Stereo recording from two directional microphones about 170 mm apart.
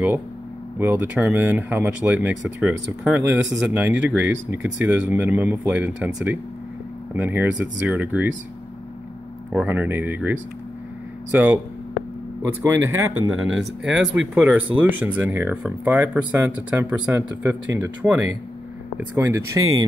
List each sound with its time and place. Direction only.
0.7 s speech: 10° right (ahead or behind)
9.5 s speech: 10° right (ahead or behind)
11.3 s speech: 10° right (ahead or behind)
12.6 s speech: 15° right (ahead or behind)
13.6 s speech: centre (ahead or behind); by 19.8 s 20° right (ahead or behind)